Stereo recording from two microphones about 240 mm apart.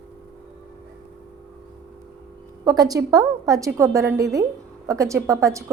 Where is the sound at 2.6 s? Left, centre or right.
Centre.